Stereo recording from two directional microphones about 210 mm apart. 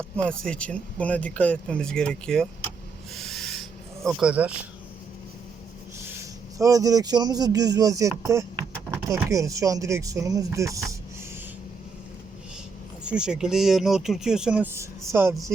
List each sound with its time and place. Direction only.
0.2 s speech: 5° left (ahead or behind)
3.2 s owl: centre (ahead or behind)
4.0 s speech: centre (ahead or behind)
6.1 s speech: 15° right (ahead or behind)
13.1 s speech: 5° right (ahead or behind)